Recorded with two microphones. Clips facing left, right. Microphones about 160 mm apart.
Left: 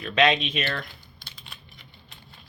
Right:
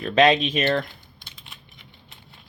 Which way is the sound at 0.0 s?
40° right (ahead or behind).